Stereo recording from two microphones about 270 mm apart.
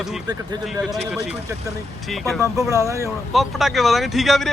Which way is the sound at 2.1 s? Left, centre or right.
Centre.